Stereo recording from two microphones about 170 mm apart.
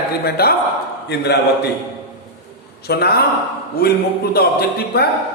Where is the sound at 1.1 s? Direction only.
75° left (ahead or behind).